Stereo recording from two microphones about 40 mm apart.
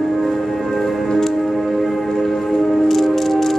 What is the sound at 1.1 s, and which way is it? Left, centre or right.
Music, centre.